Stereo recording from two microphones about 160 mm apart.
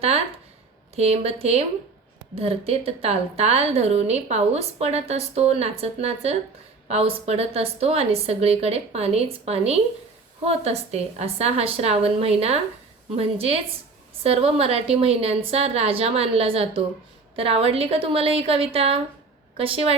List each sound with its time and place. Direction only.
0.9 s a woman's voice: 40° right (ahead or behind)